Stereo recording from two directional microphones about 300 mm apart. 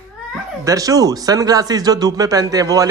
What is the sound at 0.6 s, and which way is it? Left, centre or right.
Speech, centre.